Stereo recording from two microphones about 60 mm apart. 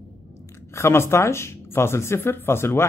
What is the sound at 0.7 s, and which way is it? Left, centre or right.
Speech, left.